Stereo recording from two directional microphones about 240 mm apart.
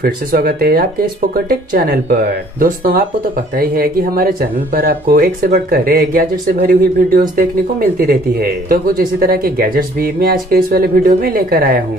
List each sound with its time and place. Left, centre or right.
0.0 s speech: right